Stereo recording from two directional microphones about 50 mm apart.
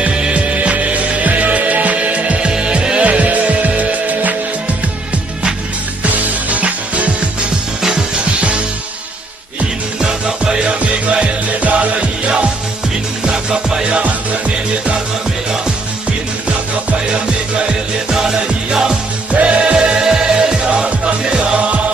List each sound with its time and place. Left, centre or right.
0.0 s music: right
6.0 s music: right
9.9 s music: centre
13.3 s music: centre
18.1 s music: centre
19.3 s music: right